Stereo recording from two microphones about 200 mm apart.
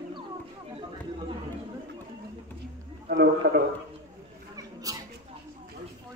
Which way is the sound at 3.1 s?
55° right (ahead or behind).